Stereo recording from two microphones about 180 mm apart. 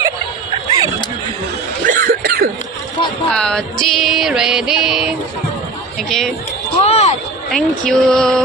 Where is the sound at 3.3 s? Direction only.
5° left (ahead or behind).